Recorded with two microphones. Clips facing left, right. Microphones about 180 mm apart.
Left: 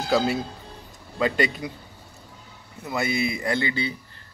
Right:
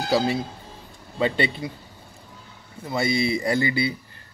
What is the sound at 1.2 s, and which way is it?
Speech, 30° right (ahead or behind).